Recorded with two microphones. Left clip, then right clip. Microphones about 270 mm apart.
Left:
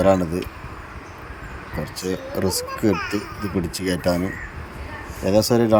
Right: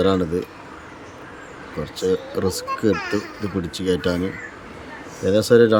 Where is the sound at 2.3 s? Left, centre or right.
Centre.